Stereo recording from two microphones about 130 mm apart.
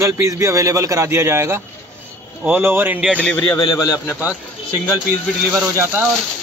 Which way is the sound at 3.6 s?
30° left (ahead or behind).